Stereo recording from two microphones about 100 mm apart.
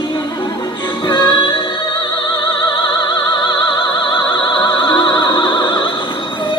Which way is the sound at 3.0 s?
45° left (ahead or behind).